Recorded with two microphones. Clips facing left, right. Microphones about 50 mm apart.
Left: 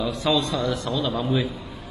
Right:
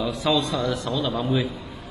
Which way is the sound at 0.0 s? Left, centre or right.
Centre.